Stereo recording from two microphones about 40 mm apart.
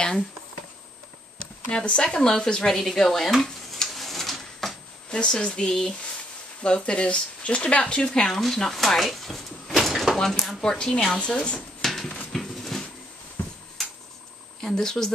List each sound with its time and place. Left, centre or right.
1.4 s speech: left
3.4 s a sound: centre
3.9 s a sound: centre
5.1 s speech: left
8.6 s speech: centre
11.1 s speech: left
11.8 s a sound: centre
12.3 s dog: centre
14.6 s speech: centre